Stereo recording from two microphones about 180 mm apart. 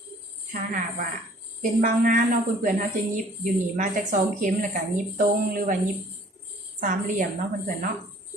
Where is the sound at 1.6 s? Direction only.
50° right (ahead or behind).